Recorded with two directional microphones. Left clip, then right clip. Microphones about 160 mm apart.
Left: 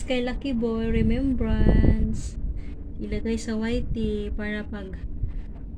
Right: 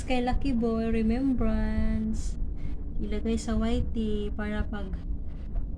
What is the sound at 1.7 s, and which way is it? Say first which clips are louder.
Speech: left 9 dB; 90° right.